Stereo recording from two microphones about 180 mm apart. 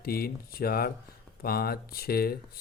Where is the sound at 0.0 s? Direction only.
55° left (ahead or behind).